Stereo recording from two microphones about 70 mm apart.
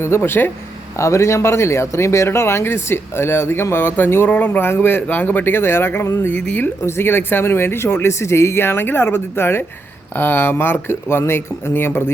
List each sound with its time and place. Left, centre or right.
0.0 s speech: left
0.9 s speech: left
6.3 s speech: left
6.8 s speech: left